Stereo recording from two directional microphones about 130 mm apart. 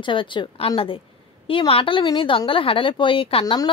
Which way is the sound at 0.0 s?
40° left (ahead or behind).